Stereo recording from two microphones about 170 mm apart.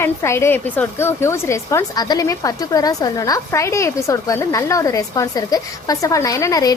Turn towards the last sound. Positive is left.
turn(degrees=20)  # may be behind; listen again after turning